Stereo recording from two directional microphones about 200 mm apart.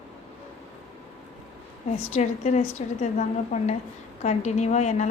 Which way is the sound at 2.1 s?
35° left (ahead or behind).